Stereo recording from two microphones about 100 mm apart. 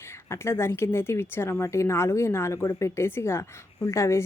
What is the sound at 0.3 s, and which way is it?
Speech, 25° left (ahead or behind).